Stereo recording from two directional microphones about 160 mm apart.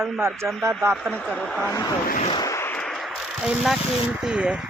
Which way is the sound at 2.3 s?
20° left (ahead or behind).